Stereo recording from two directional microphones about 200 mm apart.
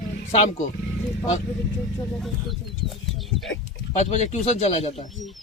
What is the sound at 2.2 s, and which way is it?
Bird, centre (ahead or behind).